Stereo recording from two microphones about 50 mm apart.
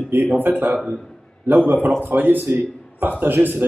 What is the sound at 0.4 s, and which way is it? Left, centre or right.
A man's voice, right.